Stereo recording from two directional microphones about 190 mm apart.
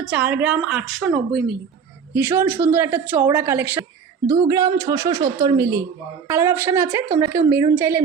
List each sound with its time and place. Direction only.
0.0 s a woman's voice: 5° right (ahead or behind)
2.1 s a woman's voice: 15° right (ahead or behind)